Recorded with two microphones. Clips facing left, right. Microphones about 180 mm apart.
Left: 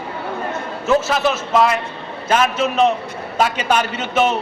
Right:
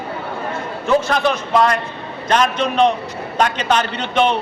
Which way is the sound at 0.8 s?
5° left (ahead or behind).